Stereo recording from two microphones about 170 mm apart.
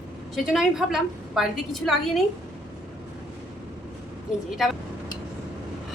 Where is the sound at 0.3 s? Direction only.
Centre (ahead or behind).